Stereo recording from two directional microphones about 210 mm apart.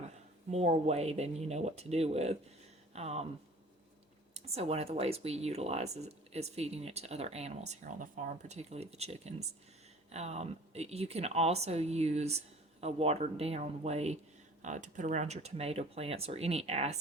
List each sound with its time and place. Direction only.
0.5 s speech: 30° right (ahead or behind)
2.9 s a sound: 30° right (ahead or behind)
4.4 s speech: 30° right (ahead or behind)